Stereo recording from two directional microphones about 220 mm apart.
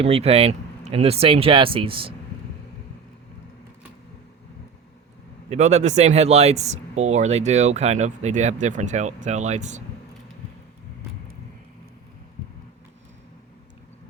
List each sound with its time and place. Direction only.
0.0 s speech: 25° right (ahead or behind)
5.5 s speech: 30° right (ahead or behind)